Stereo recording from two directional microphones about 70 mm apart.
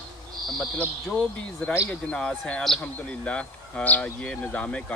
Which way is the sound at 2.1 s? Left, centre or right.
Centre.